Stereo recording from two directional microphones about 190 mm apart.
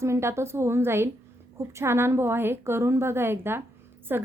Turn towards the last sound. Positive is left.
turn(degrees=-10)  # may be behind; listen again after turning